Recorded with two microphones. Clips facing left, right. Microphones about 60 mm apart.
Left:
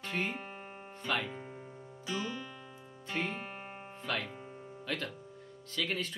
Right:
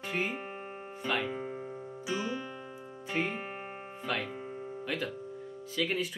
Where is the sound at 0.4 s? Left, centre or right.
Right.